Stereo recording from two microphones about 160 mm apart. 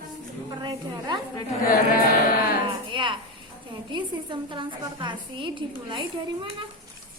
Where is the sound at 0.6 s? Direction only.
30° right (ahead or behind).